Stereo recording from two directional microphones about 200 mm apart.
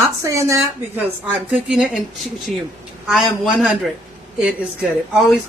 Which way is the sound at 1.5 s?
5° right (ahead or behind).